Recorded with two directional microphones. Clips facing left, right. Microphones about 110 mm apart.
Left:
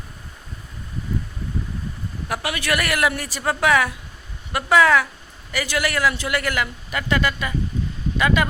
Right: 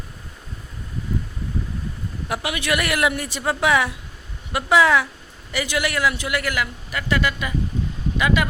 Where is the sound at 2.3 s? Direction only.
20° right (ahead or behind).